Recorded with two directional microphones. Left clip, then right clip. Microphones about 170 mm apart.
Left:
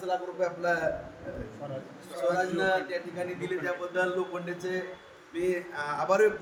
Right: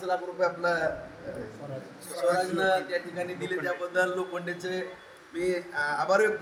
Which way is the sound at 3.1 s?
20° right (ahead or behind).